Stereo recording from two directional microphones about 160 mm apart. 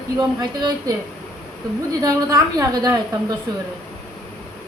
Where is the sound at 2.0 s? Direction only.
20° right (ahead or behind).